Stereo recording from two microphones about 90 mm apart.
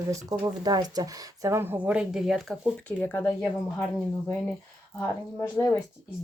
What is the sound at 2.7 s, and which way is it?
Speech, 15° left (ahead or behind).